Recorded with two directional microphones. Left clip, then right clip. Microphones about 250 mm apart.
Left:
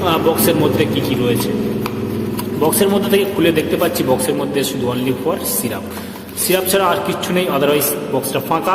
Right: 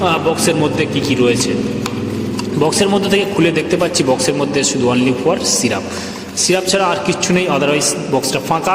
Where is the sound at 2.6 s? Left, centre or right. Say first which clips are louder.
Right 1 dB; right.